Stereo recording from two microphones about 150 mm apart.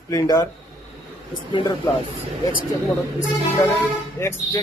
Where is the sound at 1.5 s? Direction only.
35° left (ahead or behind).